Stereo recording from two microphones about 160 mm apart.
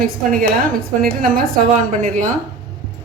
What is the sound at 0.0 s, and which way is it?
Speech, 65° right (ahead or behind).